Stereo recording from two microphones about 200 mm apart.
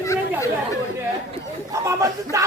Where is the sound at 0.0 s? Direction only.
15° left (ahead or behind).